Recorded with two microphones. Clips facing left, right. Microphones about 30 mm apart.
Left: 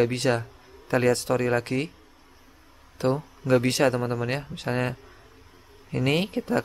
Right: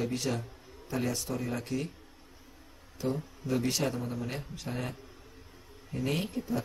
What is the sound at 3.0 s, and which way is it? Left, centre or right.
A man's voice, left.